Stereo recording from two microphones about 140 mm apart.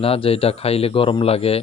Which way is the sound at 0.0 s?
45° left (ahead or behind).